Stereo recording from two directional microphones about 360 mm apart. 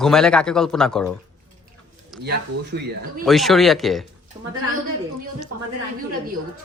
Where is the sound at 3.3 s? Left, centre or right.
Centre.